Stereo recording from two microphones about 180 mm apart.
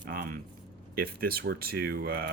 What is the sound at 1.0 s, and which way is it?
Speech, 55° right (ahead or behind).